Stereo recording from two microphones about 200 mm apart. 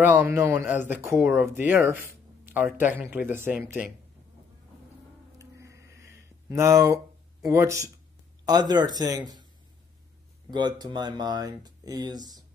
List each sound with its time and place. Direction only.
0.0 s speech: 10° right (ahead or behind)
5.4 s a sound: 15° right (ahead or behind)
7.4 s speech: 15° right (ahead or behind)
10.5 s speech: 20° right (ahead or behind)